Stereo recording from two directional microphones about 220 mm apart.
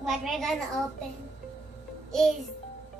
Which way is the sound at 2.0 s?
Centre (ahead or behind).